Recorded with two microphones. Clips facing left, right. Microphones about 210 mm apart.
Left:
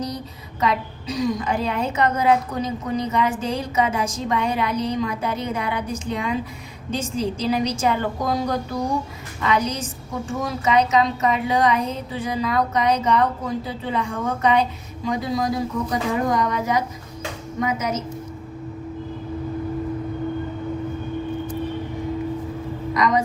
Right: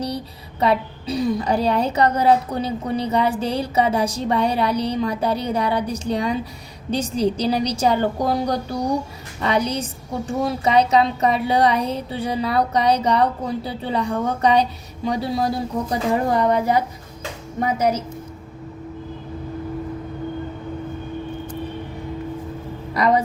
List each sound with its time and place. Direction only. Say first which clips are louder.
0.6 s a woman's voice: right 3 dB; 30° right (ahead or behind)
23.0 s music: right 2 dB; 35° right (ahead or behind)